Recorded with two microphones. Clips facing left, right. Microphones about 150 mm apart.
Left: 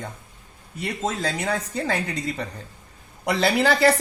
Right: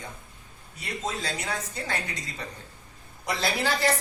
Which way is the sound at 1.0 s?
60° left (ahead or behind).